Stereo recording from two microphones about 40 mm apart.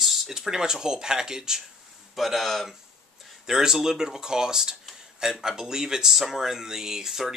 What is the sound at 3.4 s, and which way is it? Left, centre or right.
Speech, centre.